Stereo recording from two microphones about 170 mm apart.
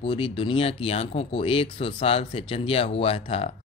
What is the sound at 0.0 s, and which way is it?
Speech, 30° left (ahead or behind).